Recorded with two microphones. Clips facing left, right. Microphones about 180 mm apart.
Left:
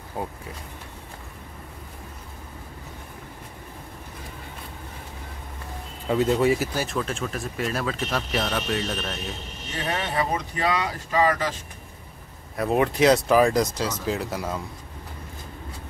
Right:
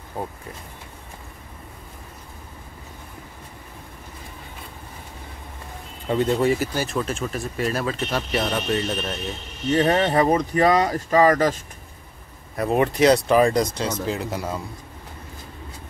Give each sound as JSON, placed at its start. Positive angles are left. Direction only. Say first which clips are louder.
{"t": 0.2, "sound": "speech", "louder": "right 1 dB", "side_deg": 0}
{"t": 6.0, "sound": "speech", "louder": "even", "side_deg": 5}
{"t": 9.8, "sound": "speech", "louder": "right 8 dB", "side_deg": -45}
{"t": 12.5, "sound": "speech", "louder": "right 1 dB", "side_deg": 0}